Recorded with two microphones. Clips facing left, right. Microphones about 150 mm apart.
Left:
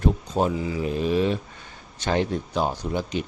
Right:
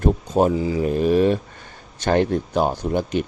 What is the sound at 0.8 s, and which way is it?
Speech, 50° right (ahead or behind).